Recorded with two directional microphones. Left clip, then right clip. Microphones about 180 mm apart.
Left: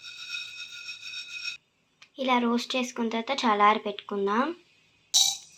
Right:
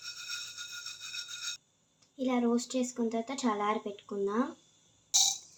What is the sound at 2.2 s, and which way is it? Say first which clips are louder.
Speech: left 6 dB; 20° left (ahead or behind).